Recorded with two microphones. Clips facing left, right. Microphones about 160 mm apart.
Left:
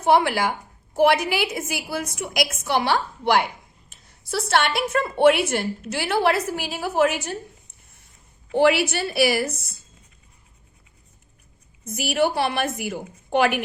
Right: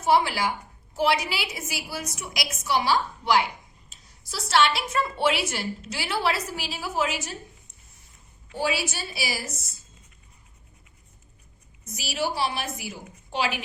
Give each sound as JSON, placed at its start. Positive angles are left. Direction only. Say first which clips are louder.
{"t": 0.0, "sound": "a woman's voice", "louder": "left 4 dB", "side_deg": 55}
{"t": 8.5, "sound": "a woman's voice", "louder": "left 10 dB", "side_deg": 65}
{"t": 11.9, "sound": "a woman's voice", "louder": "left 7 dB", "side_deg": 55}